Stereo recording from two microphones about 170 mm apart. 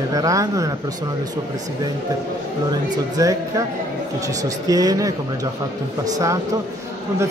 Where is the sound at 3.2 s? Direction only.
20° right (ahead or behind).